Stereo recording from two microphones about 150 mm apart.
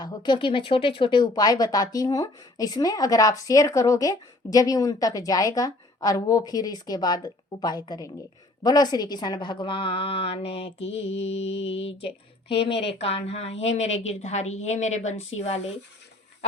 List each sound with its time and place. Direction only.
0.0 s a woman's voice: 30° left (ahead or behind); by 15.6 s 45° left (ahead or behind)